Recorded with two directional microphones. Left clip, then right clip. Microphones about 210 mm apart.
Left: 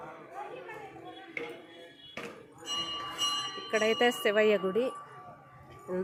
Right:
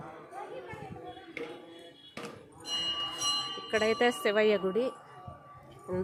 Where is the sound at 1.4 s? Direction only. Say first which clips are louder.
Left 2 dB; 55° right (ahead or behind).